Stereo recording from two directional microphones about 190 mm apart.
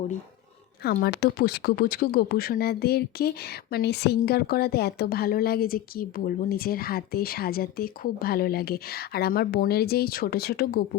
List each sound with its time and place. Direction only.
0.8 s speech: 55° left (ahead or behind)